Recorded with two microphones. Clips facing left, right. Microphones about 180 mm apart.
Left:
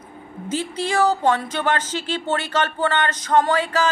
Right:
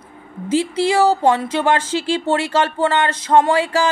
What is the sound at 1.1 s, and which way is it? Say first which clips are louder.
Speech: right 4 dB; 30° right (ahead or behind).